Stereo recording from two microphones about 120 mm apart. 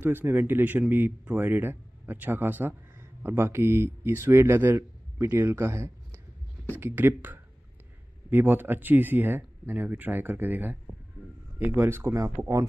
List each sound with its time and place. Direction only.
0.0 s speech: 20° right (ahead or behind)
6.1 s a sound: 15° left (ahead or behind)
6.8 s speech: 20° right (ahead or behind)